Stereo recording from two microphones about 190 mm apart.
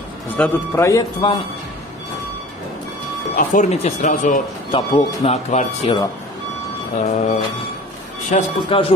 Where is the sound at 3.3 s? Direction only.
40° left (ahead or behind).